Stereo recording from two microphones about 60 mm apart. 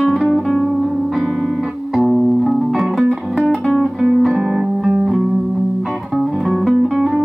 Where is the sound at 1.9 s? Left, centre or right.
Centre.